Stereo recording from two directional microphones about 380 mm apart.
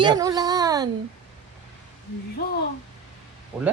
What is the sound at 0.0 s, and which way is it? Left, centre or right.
Speech, centre.